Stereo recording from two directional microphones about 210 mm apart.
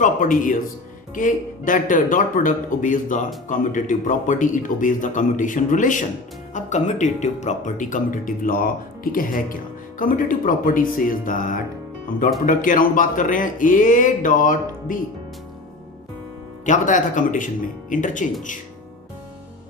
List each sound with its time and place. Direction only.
0.0 s a man's voice: 40° left (ahead or behind)
16.6 s speech: 35° left (ahead or behind)